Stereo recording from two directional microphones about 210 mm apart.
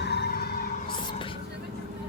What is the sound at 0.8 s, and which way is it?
Music, 25° left (ahead or behind).